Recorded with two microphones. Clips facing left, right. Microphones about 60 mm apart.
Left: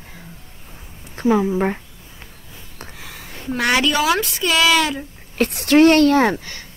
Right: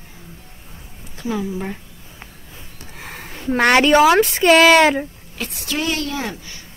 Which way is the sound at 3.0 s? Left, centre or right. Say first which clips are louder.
Right 7 dB; right.